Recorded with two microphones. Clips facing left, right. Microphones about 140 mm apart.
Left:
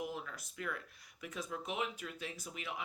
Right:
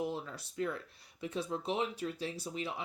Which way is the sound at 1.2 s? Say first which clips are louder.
Right 6 dB; 30° right (ahead or behind).